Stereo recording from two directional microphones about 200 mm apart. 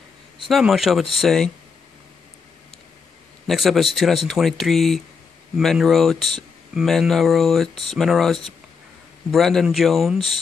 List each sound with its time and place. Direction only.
0.5 s speech: centre (ahead or behind)
3.4 s speech: centre (ahead or behind)